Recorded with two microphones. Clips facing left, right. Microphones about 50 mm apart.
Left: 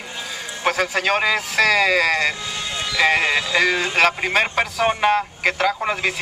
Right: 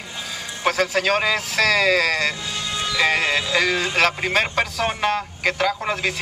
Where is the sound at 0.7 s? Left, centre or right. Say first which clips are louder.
Even; centre.